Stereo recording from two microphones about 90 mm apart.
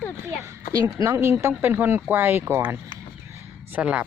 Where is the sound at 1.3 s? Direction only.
25° right (ahead or behind).